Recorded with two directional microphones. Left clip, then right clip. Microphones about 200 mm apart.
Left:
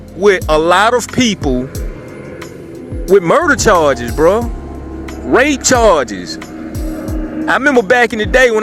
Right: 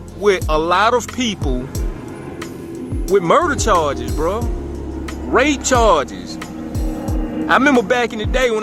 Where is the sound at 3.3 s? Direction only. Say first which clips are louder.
Left 2 dB; 25° left (ahead or behind).